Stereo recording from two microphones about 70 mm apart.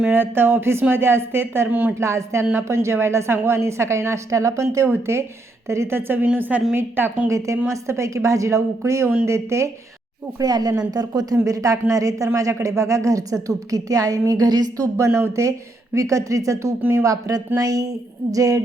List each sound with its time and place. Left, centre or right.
0.1 s a woman's voice: right
2.0 s a woman's voice: right
6.2 s a woman's voice: right
6.7 s a woman's voice: right
7.3 s a woman's voice: right
10.4 s a woman's voice: right
14.8 s a woman's voice: right